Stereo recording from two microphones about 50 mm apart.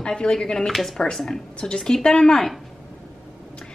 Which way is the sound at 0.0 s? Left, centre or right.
Centre.